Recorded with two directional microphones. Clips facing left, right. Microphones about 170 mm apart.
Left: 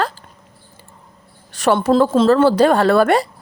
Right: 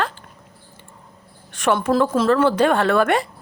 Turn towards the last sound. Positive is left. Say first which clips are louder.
# left 4 dB
turn(degrees=35)  # may be behind; listen again after turning